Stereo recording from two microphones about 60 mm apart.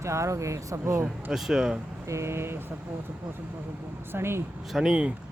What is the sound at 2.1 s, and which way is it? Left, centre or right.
Speech, right.